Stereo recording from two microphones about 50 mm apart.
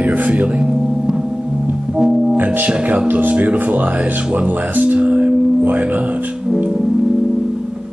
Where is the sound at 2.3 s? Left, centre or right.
Right.